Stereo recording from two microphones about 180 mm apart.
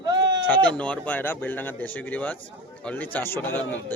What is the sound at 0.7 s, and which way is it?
Speech, 5° left (ahead or behind).